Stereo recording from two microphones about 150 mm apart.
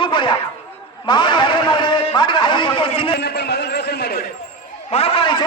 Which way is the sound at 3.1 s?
90° left.